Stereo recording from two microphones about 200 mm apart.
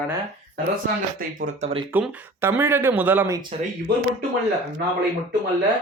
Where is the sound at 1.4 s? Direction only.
35° right (ahead or behind).